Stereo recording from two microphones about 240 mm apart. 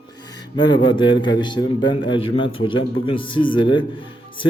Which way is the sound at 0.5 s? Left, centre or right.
Centre.